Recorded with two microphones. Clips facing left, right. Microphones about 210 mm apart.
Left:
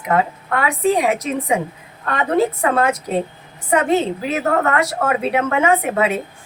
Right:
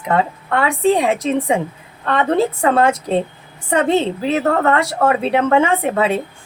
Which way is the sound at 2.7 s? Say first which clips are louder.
Right 3 dB; 30° right (ahead or behind).